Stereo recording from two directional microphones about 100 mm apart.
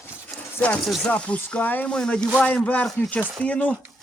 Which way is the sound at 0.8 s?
5° left (ahead or behind).